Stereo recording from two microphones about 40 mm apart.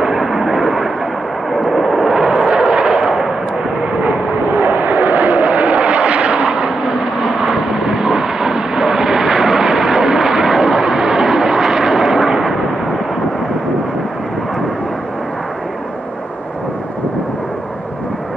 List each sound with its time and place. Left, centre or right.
0.0 s vehicle: centre
1.5 s artillery fire: centre
4.6 s vehicle: right
4.9 s vehicle: right; by 12.5 s centre